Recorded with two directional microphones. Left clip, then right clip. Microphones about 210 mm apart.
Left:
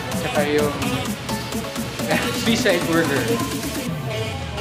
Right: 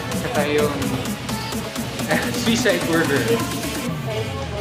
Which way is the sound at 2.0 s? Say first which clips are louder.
Even; 15° left (ahead or behind).